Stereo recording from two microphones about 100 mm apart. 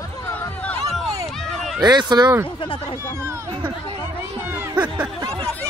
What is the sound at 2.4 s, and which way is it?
Speech, 65° left (ahead or behind).